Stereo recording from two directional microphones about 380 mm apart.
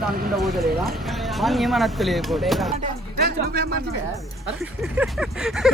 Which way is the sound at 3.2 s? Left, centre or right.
Right.